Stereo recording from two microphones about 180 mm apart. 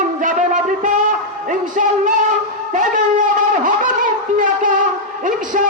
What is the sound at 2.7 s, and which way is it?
Shofar, 45° right (ahead or behind).